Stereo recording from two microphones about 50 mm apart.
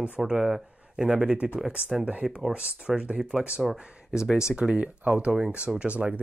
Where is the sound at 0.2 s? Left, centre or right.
Centre.